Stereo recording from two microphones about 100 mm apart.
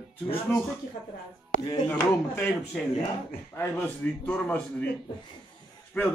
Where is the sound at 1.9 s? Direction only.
20° left (ahead or behind).